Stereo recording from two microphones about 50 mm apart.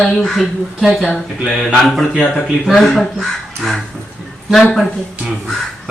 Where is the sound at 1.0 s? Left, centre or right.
Centre.